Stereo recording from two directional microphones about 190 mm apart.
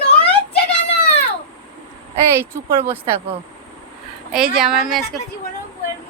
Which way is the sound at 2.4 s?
15° right (ahead or behind).